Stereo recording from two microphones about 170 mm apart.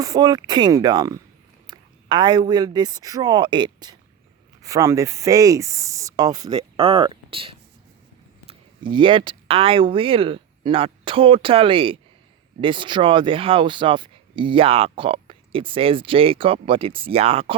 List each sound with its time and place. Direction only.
0.0 s speech: 20° right (ahead or behind)